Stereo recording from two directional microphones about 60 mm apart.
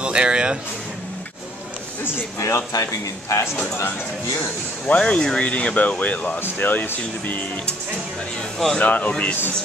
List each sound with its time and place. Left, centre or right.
0.0 s music: centre
2.3 s a man's voice: left
4.8 s speech: centre
8.7 s speech: left